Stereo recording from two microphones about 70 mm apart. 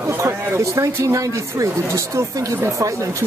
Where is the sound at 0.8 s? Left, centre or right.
Right.